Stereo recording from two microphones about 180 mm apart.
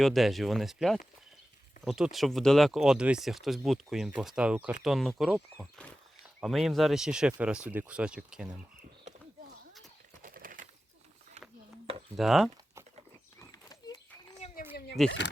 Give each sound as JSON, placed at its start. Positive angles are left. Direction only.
{"t": 0.0, "sound": "speech", "side_deg": 0}
{"t": 10.2, "sound": "bird", "side_deg": -50}
{"t": 11.4, "sound": "a sound", "side_deg": -40}
{"t": 12.1, "sound": "speech", "side_deg": 0}
{"t": 13.5, "sound": "dog", "side_deg": 20}
{"t": 15.0, "sound": "speech", "side_deg": 0}